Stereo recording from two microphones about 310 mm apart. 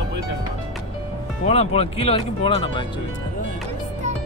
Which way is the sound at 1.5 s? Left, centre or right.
Centre.